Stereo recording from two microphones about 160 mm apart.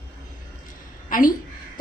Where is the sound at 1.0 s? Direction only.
55° left (ahead or behind).